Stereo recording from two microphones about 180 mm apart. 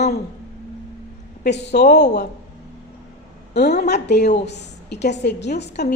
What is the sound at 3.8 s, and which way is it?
A woman's voice, 70° left (ahead or behind).